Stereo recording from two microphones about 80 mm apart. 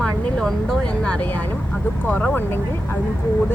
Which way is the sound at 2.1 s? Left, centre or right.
Centre.